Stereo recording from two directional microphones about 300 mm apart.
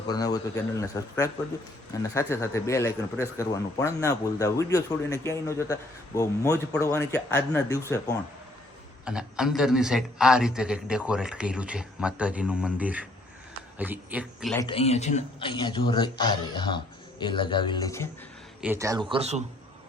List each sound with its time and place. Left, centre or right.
0.1 s a man's voice: centre
9.0 s a man's voice: centre
14.5 s a man's voice: centre
18.6 s speech: centre